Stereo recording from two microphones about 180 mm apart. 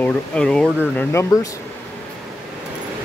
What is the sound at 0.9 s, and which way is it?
Speech, 15° left (ahead or behind).